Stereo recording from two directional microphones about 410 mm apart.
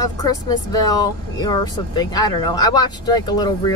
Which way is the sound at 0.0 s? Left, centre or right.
Centre.